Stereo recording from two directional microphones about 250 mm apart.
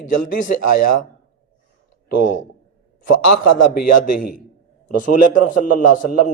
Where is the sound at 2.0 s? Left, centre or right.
Left.